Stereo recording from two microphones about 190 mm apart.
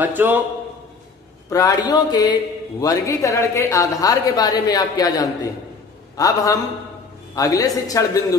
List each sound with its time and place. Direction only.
0.0 s a man's voice: 10° right (ahead or behind)
1.5 s a woman's voice: 20° left (ahead or behind)